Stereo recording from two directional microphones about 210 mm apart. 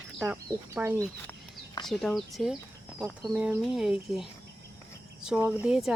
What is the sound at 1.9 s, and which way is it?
Speech, centre (ahead or behind).